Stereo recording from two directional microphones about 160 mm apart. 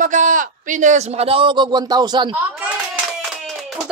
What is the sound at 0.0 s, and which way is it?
A man's voice, 50° right (ahead or behind).